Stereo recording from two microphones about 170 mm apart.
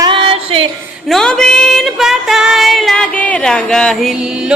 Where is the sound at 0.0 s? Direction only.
30° right (ahead or behind).